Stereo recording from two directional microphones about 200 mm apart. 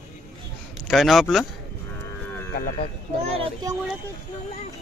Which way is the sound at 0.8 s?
Centre (ahead or behind).